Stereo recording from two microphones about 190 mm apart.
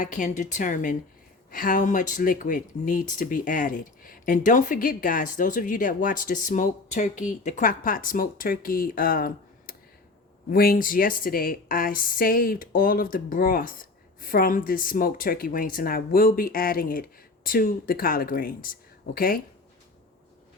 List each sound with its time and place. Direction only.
0.0 s a woman's voice: 45° left (ahead or behind)